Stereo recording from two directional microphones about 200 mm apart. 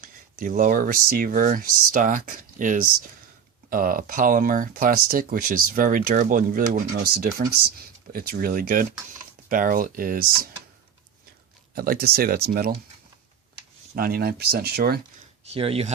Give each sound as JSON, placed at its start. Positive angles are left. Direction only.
{"t": 0.0, "sound": "speech", "side_deg": -40}
{"t": 11.7, "sound": "speech", "side_deg": -50}
{"t": 13.9, "sound": "speech", "side_deg": -45}
{"t": 15.5, "sound": "speech", "side_deg": -30}